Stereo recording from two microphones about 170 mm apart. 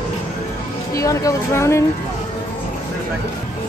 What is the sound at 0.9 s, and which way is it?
Speech, 20° left (ahead or behind).